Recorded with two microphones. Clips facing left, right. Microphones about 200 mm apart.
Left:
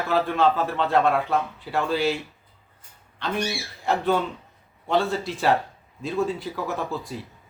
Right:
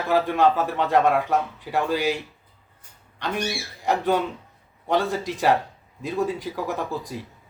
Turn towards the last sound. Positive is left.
turn(degrees=-15)  # may be behind; listen again after turning